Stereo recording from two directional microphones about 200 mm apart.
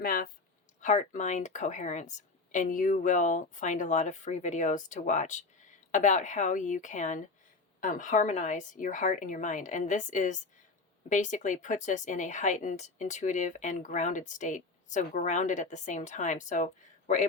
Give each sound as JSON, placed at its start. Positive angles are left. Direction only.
{"t": 0.0, "sound": "a woman's voice", "side_deg": 45}